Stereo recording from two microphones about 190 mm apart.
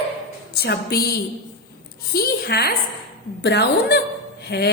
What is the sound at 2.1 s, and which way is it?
A woman's voice, 55° left (ahead or behind).